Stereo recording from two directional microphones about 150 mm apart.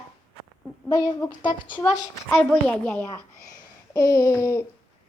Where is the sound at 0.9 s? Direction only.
25° left (ahead or behind).